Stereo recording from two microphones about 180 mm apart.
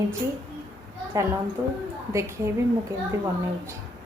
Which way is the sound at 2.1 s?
15° right (ahead or behind).